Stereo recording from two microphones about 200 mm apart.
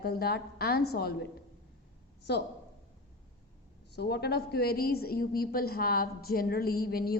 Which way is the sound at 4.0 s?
55° left (ahead or behind).